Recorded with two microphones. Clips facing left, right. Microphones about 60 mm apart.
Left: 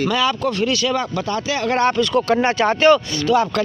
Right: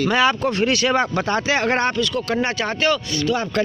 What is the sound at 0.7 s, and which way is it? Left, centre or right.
Speech, right.